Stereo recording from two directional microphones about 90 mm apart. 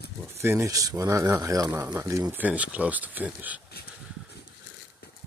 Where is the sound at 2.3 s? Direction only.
15° right (ahead or behind).